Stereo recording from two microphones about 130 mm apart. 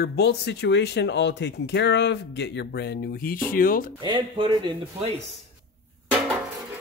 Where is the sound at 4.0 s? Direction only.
35° right (ahead or behind).